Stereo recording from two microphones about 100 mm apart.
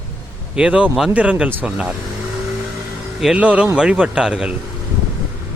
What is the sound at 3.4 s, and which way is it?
Speech, 15° right (ahead or behind).